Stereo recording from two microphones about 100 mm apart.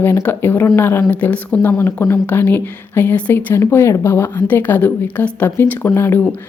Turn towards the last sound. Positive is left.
turn(degrees=25)  # may be behind; listen again after turning